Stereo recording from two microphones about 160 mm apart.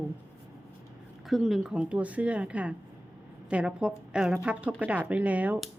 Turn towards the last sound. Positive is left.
turn(degrees=-10)  # may be behind; listen again after turning